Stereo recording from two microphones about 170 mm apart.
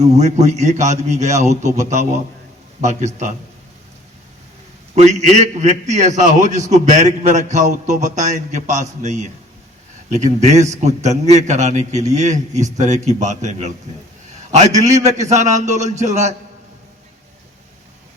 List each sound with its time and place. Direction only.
0.0 s a man's voice: 40° right (ahead or behind)
4.9 s a man's voice: 40° right (ahead or behind)